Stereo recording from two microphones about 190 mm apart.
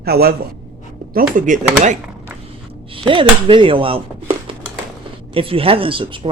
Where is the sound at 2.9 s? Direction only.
25° right (ahead or behind).